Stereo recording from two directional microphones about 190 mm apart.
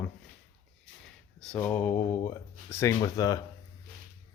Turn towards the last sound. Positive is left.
turn(degrees=20)  # may be behind; listen again after turning